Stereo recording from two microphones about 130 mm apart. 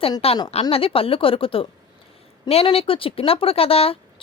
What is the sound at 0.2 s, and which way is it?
Speech, 50° left (ahead or behind).